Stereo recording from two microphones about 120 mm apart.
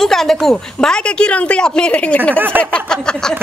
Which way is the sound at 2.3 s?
15° right (ahead or behind).